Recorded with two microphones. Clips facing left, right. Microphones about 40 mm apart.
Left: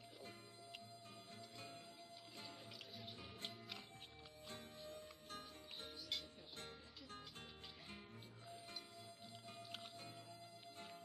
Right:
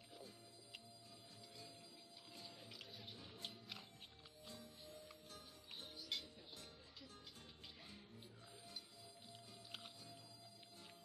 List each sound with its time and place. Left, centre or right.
4.5 s music: left
5.8 s music: centre